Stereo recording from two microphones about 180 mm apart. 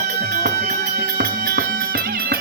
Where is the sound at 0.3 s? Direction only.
60° right (ahead or behind).